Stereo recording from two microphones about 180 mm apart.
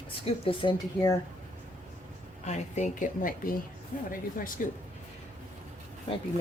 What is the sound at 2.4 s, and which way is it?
A woman's voice, 40° left (ahead or behind).